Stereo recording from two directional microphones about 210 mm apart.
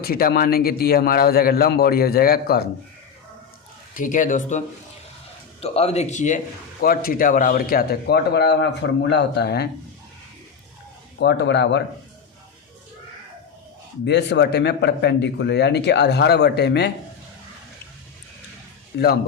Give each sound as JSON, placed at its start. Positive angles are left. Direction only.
{"t": 0.0, "sound": "speech", "side_deg": 45}
{"t": 3.9, "sound": "a man's voice", "side_deg": 40}
{"t": 11.2, "sound": "speech", "side_deg": 55}
{"t": 14.0, "sound": "speech", "side_deg": 55}
{"t": 18.9, "sound": "speech", "side_deg": 55}